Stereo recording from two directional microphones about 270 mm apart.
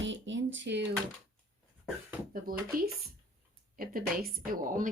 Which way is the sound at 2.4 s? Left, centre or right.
Right.